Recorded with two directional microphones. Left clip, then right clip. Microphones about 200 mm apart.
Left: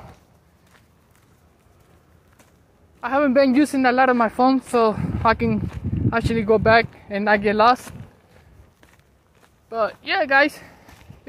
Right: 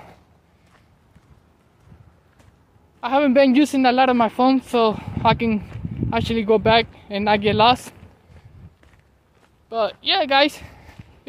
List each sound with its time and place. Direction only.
3.0 s speech: 15° right (ahead or behind)
9.7 s speech: 15° right (ahead or behind)